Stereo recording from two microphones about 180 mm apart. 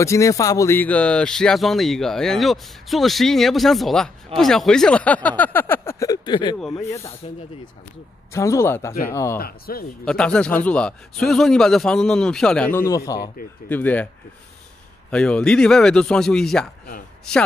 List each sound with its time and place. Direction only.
0.0 s speech: 15° left (ahead or behind)
8.3 s speech: 15° left (ahead or behind)
9.4 s speech: 55° left (ahead or behind)
10.0 s speech: 5° left (ahead or behind)
15.0 s speech: 5° left (ahead or behind)